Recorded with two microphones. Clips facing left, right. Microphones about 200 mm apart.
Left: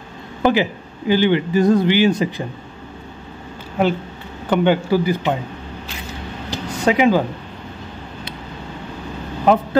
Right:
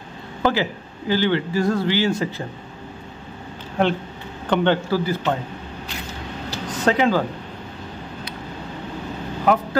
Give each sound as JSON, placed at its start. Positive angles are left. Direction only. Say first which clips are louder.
{"t": 0.4, "sound": "speech", "louder": "left 4 dB", "side_deg": 15}
{"t": 3.8, "sound": "speech", "louder": "left 2 dB", "side_deg": 5}
{"t": 6.5, "sound": "a sound", "louder": "left 2 dB", "side_deg": 15}
{"t": 9.5, "sound": "speech", "louder": "left 3 dB", "side_deg": 25}